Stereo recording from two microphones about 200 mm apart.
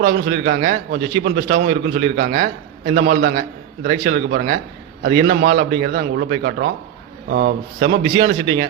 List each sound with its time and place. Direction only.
0.0 s a man's voice: 50° right (ahead or behind)